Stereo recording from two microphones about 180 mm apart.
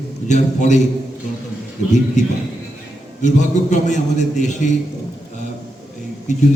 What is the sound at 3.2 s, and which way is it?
A man's voice, 40° left (ahead or behind).